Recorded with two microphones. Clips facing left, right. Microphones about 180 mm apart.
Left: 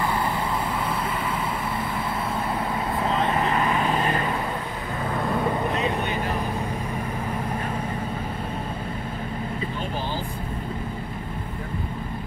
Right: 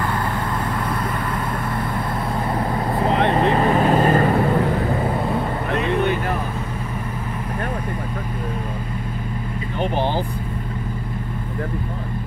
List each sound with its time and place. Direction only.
3.1 s vehicle: 65° right (ahead or behind)
3.5 s vehicle: 40° right (ahead or behind)
9.8 s vehicle: 65° right (ahead or behind)